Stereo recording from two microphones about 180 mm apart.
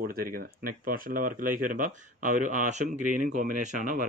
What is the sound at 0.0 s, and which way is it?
Speech, 55° right (ahead or behind).